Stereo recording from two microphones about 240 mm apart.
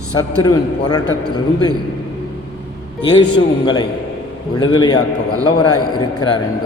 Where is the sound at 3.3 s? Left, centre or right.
Centre.